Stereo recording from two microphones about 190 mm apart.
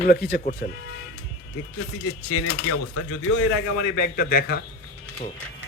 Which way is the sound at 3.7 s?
55° left (ahead or behind).